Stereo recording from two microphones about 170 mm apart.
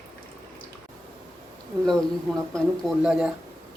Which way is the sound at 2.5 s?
Centre (ahead or behind).